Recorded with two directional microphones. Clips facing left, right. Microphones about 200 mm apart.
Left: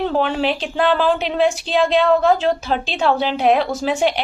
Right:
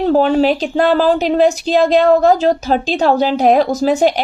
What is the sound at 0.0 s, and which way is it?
Speech, 40° right (ahead or behind).